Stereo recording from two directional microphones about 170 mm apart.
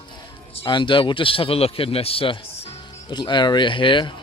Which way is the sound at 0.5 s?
30° left (ahead or behind).